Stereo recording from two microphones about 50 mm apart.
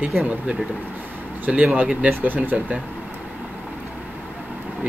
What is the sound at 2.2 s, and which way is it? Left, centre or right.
Speech, right.